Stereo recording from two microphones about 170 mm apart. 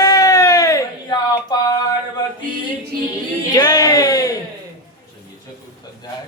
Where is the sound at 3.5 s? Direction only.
20° left (ahead or behind).